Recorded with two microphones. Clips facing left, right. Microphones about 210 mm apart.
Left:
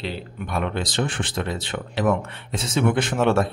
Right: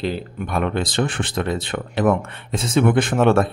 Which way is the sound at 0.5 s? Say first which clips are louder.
Right 4 dB; 55° right (ahead or behind).